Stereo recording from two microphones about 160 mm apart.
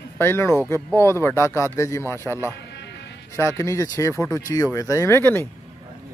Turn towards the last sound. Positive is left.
turn(degrees=15)  # may be behind; listen again after turning